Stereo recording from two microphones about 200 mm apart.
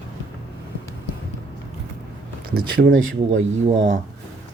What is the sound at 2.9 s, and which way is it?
Speech, 70° right (ahead or behind).